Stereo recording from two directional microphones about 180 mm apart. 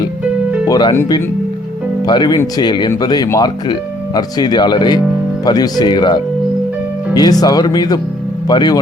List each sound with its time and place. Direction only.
0.7 s speech: 25° left (ahead or behind)
7.2 s speech: 20° left (ahead or behind)